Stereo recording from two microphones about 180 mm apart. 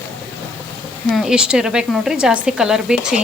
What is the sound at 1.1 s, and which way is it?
Speech, centre (ahead or behind).